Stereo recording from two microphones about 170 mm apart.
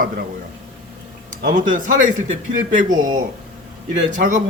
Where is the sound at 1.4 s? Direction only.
50° right (ahead or behind).